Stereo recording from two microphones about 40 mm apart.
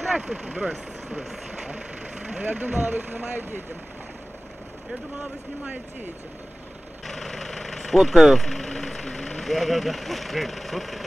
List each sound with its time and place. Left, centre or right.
0.0 s speech: centre
1.0 s speech: centre
1.5 s vehicle: centre
2.4 s speech: right
3.1 s speech: right
5.1 s speech: right
7.1 s vehicle: centre
8.5 s speech: centre